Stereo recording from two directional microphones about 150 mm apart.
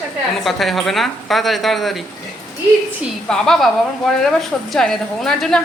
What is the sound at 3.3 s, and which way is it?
Speech, 5° left (ahead or behind).